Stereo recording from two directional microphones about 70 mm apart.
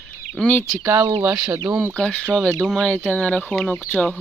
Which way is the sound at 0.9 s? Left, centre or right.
Right.